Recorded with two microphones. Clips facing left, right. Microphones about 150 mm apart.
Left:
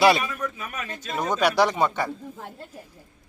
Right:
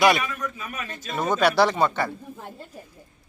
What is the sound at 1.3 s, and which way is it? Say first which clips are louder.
Speech: right 1 dB; 15° left (ahead or behind).